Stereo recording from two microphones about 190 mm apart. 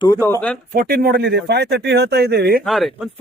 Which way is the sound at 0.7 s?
50° right (ahead or behind).